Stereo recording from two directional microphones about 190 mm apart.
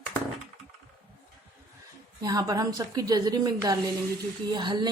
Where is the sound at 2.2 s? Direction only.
20° right (ahead or behind).